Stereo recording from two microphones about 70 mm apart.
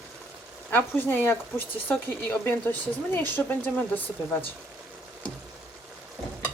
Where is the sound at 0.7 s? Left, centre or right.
Left.